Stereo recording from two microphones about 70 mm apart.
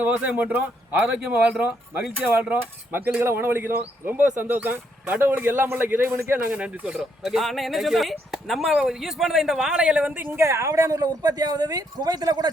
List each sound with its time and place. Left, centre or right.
0.0 s a man's voice: right
6.4 s speech: right
10.3 s speech: right